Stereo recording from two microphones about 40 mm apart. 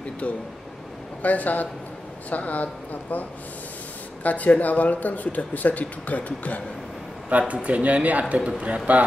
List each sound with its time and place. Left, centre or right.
1.2 s a woman's voice: left
7.2 s speech: right